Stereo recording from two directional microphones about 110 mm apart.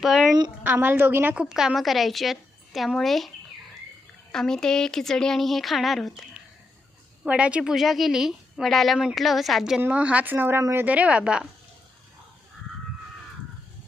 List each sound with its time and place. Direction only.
0.0 s a woman's voice: 5° right (ahead or behind)
0.6 s a woman's voice: 15° right (ahead or behind); by 6.2 s centre (ahead or behind)
7.3 s a woman's voice: 10° right (ahead or behind); by 10.8 s 25° right (ahead or behind)
10.8 s a woman's voice: 10° right (ahead or behind)